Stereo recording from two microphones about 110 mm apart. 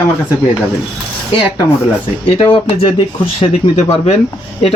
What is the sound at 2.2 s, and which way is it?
Speech, 55° left (ahead or behind).